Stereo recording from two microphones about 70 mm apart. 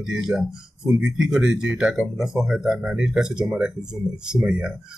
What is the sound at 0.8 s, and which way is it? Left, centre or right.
Speech, centre.